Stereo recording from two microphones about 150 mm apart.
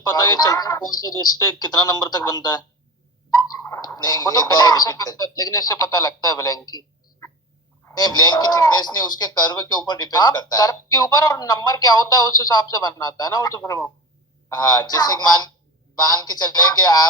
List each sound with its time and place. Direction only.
0.1 s speech: 25° left (ahead or behind)
3.6 s speech: 25° left (ahead or behind)